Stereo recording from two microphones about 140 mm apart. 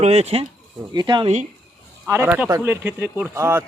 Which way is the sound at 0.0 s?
50° right (ahead or behind).